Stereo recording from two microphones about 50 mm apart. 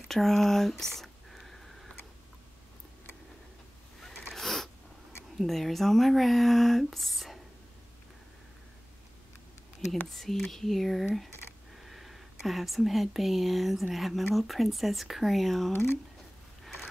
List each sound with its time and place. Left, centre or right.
0.1 s a sound: centre
4.0 s wheeze: centre
5.4 s speech: centre
10.0 s speech: centre
15.7 s speech: left